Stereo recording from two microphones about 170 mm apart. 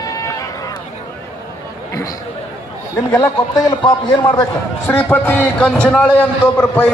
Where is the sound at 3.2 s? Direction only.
20° left (ahead or behind).